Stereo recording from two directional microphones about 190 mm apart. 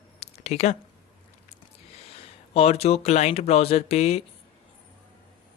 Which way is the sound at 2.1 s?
30° left (ahead or behind).